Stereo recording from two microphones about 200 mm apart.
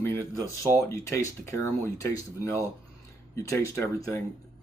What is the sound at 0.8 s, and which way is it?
Speech, 15° left (ahead or behind).